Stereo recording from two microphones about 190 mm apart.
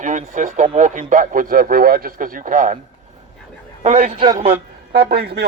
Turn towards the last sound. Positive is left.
turn(degrees=-60)  # may be behind; listen again after turning